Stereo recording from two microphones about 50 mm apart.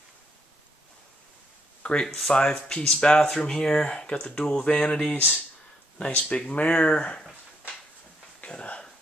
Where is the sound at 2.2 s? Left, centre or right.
Left.